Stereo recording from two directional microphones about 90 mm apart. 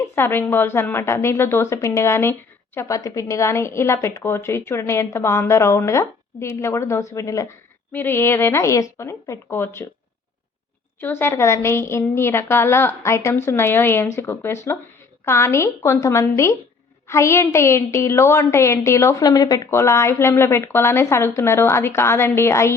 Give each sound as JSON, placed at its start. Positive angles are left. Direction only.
{"t": 0.0, "sound": "a woman's voice", "side_deg": 25}
{"t": 7.9, "sound": "a woman's voice", "side_deg": 25}
{"t": 11.0, "sound": "a woman's voice", "side_deg": 25}
{"t": 19.7, "sound": "a woman's voice", "side_deg": 30}